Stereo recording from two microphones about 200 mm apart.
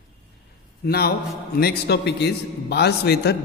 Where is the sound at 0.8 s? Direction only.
50° left (ahead or behind).